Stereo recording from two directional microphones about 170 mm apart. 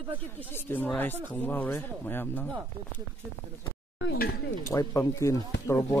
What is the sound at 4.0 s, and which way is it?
Speech, 80° left.